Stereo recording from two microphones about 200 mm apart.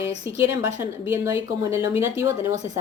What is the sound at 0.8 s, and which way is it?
Speech, 10° right (ahead or behind).